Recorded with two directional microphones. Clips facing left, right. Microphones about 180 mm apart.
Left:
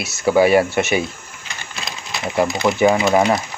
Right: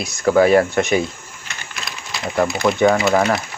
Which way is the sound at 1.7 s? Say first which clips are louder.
Left 2 dB; 20° left (ahead or behind).